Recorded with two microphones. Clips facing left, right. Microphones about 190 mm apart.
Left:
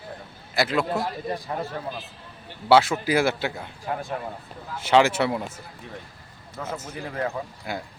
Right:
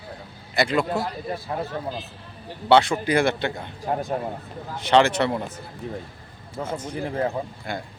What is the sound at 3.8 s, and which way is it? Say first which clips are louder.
Speech: right 4 dB; 35° right (ahead or behind).